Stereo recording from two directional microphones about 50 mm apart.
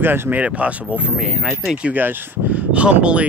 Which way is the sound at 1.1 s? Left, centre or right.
Centre.